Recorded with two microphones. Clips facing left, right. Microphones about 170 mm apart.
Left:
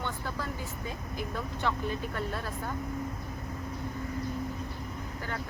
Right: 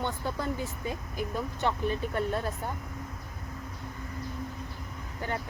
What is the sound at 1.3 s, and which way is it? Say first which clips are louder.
Speech: right 2 dB; 15° right (ahead or behind).